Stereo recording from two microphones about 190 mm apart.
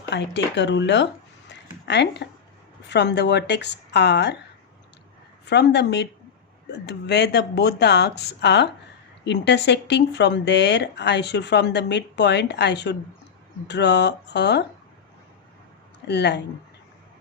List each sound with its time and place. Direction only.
0.1 s speech: 65° left (ahead or behind)
5.5 s speech: 60° left (ahead or behind)
16.0 s speech: 60° left (ahead or behind)